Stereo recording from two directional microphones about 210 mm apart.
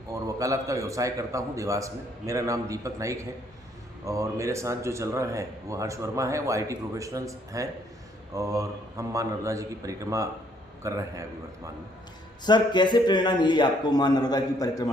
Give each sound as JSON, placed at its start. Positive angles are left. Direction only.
{"t": 0.1, "sound": "a man's voice", "side_deg": -15}
{"t": 12.5, "sound": "a man's voice", "side_deg": 20}